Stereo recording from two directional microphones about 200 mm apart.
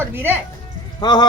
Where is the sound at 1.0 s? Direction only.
20° left (ahead or behind).